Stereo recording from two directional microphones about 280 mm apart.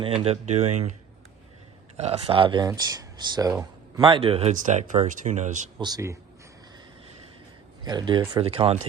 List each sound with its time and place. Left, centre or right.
0.0 s speech: centre
2.0 s speech: right
5.8 s speech: centre
7.9 s speech: centre